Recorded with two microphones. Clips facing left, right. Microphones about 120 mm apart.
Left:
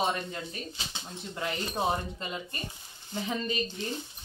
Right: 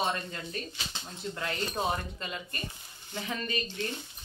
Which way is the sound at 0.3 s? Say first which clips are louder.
Even; 15° left (ahead or behind).